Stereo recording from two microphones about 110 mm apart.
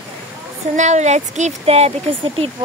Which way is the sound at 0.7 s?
90° right.